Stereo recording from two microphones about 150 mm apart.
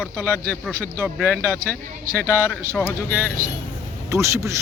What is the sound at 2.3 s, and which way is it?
Speech, 15° left (ahead or behind).